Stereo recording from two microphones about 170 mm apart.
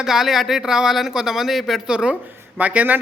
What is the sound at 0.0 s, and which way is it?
A man's voice, centre (ahead or behind).